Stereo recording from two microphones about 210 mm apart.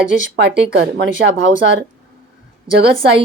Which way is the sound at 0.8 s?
50° right (ahead or behind).